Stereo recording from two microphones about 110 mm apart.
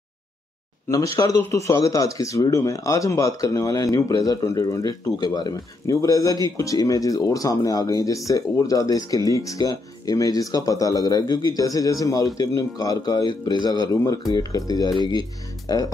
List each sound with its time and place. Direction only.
0.8 s speech: 25° left (ahead or behind)